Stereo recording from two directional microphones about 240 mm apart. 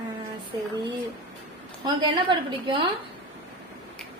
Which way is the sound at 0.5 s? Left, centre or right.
Centre.